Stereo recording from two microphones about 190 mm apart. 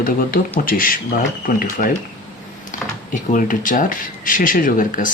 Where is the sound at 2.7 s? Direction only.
40° left (ahead or behind).